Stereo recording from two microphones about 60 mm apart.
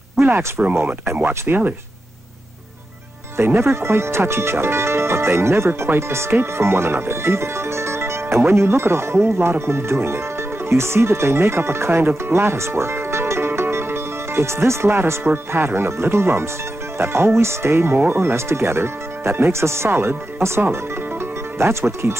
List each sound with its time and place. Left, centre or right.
0.2 s speech: right
3.3 s speech: right